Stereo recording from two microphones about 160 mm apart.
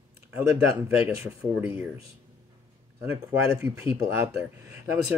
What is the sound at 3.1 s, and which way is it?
Speech, 15° right (ahead or behind).